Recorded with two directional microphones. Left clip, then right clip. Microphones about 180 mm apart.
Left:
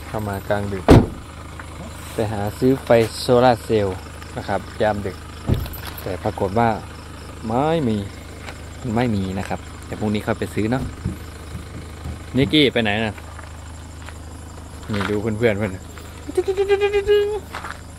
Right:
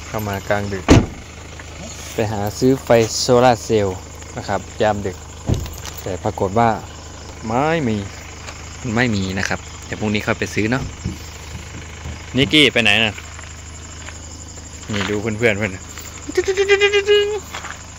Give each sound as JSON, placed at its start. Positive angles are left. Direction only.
{"t": 0.1, "sound": "speech", "side_deg": -15}
{"t": 2.1, "sound": "speech", "side_deg": -20}
{"t": 7.4, "sound": "speech", "side_deg": 0}
{"t": 12.4, "sound": "speech", "side_deg": 0}
{"t": 14.9, "sound": "speech", "side_deg": -5}